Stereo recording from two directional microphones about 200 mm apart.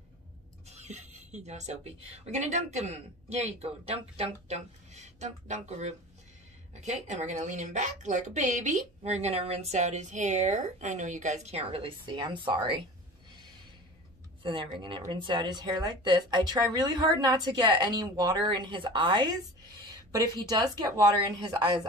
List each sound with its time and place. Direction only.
0.7 s music: 35° right (ahead or behind)
2.0 s a woman's voice: 35° right (ahead or behind)
14.4 s speech: 25° right (ahead or behind)